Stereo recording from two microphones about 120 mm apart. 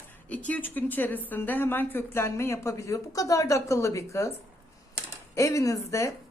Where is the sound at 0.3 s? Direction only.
15° left (ahead or behind).